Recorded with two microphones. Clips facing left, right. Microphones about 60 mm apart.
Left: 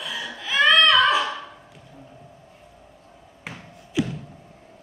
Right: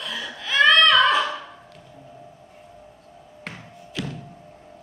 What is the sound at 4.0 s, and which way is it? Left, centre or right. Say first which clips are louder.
Music: left 7 dB; centre.